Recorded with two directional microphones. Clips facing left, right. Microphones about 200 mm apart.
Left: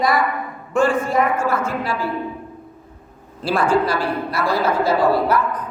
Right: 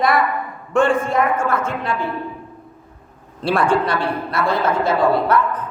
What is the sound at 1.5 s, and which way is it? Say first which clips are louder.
Speech: even; 25° right (ahead or behind).